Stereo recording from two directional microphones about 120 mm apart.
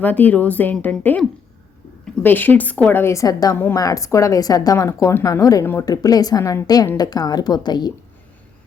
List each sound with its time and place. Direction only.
0.0 s a woman's voice: 15° left (ahead or behind)
2.2 s a woman's voice: 15° left (ahead or behind); by 7.9 s 35° left (ahead or behind)